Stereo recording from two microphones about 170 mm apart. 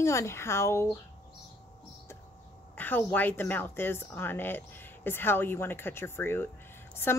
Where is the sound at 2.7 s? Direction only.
10° left (ahead or behind).